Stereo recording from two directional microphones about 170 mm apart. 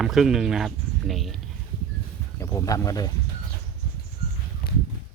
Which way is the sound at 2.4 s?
20° left (ahead or behind).